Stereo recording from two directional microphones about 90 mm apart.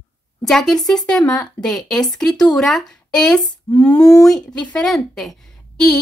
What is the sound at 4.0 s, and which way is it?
Speech, 40° left (ahead or behind).